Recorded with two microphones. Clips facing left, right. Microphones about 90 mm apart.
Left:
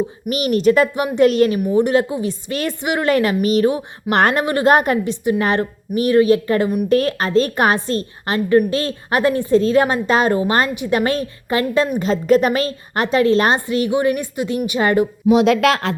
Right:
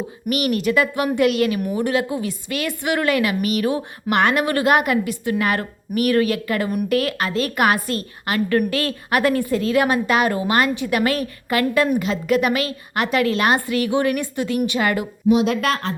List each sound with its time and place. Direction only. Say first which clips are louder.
0.3 s a woman's voice: left 4 dB; 30° left (ahead or behind)
0.9 s a woman's voice: even; 20° left (ahead or behind)
1.2 s a woman's voice: left 6 dB; 35° left (ahead or behind)
2.8 s a woman's voice: even; 20° left (ahead or behind)
3.1 s a woman's voice: left 8 dB; 35° left (ahead or behind)
15.4 s speech: left 5 dB; 90° left